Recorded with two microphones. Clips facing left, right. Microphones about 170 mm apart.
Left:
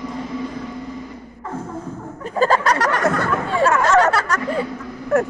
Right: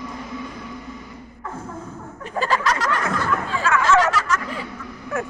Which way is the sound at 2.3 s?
50° left (ahead or behind).